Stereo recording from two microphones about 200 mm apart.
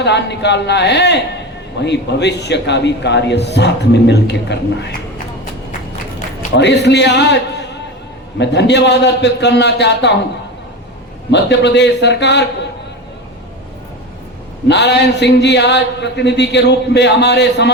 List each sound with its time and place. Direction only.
0.0 s a man's voice: 60° left (ahead or behind)
6.5 s a man's voice: 60° left (ahead or behind)
11.3 s a man's voice: 60° left (ahead or behind)
14.7 s a man's voice: 60° left (ahead or behind)